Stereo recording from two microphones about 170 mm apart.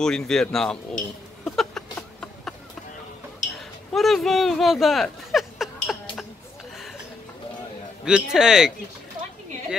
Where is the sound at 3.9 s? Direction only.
Centre (ahead or behind).